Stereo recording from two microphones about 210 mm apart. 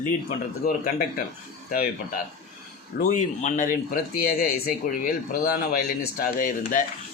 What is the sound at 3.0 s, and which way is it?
Speech, 40° left (ahead or behind).